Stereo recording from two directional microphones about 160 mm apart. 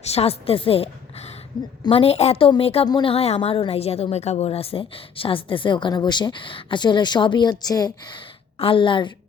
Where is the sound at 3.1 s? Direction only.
40° left (ahead or behind).